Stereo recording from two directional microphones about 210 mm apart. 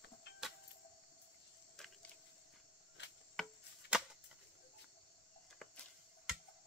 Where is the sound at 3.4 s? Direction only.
Centre (ahead or behind).